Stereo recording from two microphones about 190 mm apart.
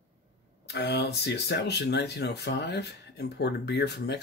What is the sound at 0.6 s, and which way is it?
Speech, 60° left (ahead or behind).